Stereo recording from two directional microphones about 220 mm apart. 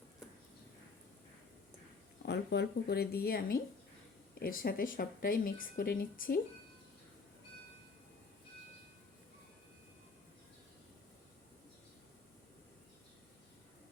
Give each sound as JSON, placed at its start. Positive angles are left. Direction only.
{"t": 2.2, "sound": "speech", "side_deg": 50}